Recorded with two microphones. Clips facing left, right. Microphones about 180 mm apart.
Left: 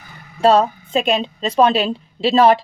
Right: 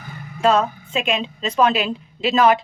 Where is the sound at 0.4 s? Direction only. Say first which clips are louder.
Left 4 dB; 35° left (ahead or behind).